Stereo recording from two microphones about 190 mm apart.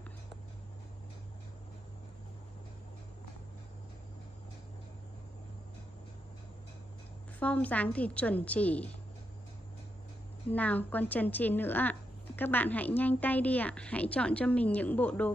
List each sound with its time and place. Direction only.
7.3 s a woman's voice: 10° left (ahead or behind)
10.5 s a woman's voice: 10° left (ahead or behind)